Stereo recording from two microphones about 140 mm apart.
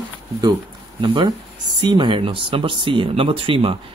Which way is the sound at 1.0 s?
35° right (ahead or behind).